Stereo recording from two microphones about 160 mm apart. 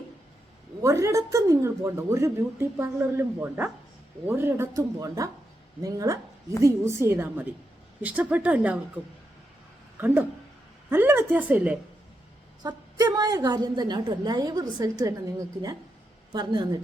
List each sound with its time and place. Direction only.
0.8 s a woman's voice: 20° right (ahead or behind)
10.8 s a woman's voice: 15° right (ahead or behind)
12.6 s a woman's voice: 25° right (ahead or behind)
16.3 s a woman's voice: 25° right (ahead or behind)